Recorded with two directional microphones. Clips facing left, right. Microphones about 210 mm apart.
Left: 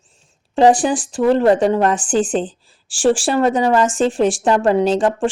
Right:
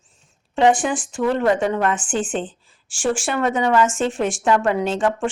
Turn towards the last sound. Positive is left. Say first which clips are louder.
# left 5 dB
turn(degrees=30)  # may be behind; listen again after turning